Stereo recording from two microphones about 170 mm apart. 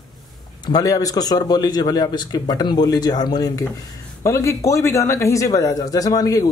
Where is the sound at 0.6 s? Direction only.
20° left (ahead or behind).